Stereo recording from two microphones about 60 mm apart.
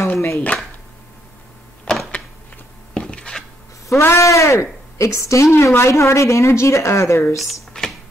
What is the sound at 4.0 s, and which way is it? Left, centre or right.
A woman's voice, left.